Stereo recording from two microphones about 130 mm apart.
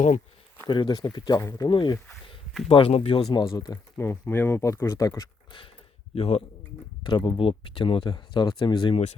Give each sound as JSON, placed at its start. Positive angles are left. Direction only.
{"t": 0.7, "sound": "speech", "side_deg": 35}
{"t": 2.6, "sound": "speech", "side_deg": 50}
{"t": 3.2, "sound": "speech", "side_deg": 35}
{"t": 3.9, "sound": "speech", "side_deg": 20}
{"t": 6.1, "sound": "speech", "side_deg": 50}
{"t": 7.0, "sound": "speech", "side_deg": 40}